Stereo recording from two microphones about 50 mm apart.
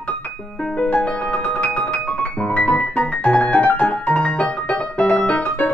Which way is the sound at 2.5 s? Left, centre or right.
Left.